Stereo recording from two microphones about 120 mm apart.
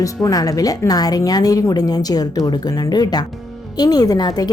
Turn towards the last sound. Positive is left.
turn(degrees=35)  # may be behind; listen again after turning